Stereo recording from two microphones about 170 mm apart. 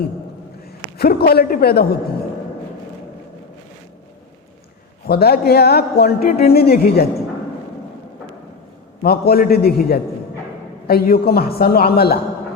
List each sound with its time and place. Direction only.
0.9 s a woman's voice: 65° left (ahead or behind)
5.0 s a man's voice: 65° left (ahead or behind)
9.0 s a woman's voice: 65° left (ahead or behind)